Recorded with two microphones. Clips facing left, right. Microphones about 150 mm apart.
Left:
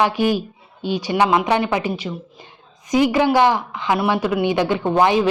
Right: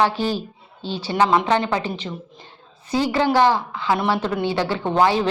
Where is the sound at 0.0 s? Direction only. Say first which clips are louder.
Left 2 dB; 15° left (ahead or behind).